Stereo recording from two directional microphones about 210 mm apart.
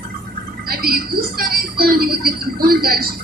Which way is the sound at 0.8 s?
45° right (ahead or behind).